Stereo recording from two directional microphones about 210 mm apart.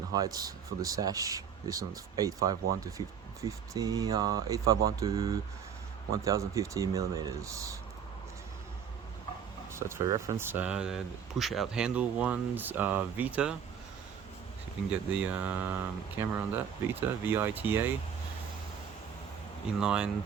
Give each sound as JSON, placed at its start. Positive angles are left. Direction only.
{"t": 0.1, "sound": "speech", "side_deg": -15}
{"t": 9.7, "sound": "speech", "side_deg": -15}
{"t": 14.8, "sound": "speech", "side_deg": -5}
{"t": 19.8, "sound": "speech", "side_deg": -5}